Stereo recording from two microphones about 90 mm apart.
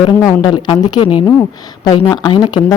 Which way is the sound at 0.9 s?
70° left (ahead or behind).